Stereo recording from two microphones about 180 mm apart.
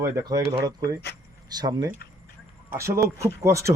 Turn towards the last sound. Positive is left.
turn(degrees=-15)  # may be behind; listen again after turning